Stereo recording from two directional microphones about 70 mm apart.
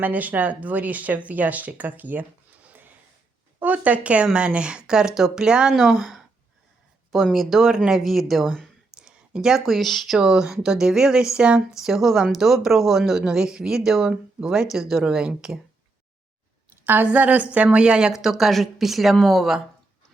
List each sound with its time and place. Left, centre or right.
0.0 s speech: right
2.6 s snort: right
3.6 s speech: right; by 6.2 s centre
7.3 s speech: centre
9.0 s speech: centre
16.8 s a woman's voice: right; by 19.5 s centre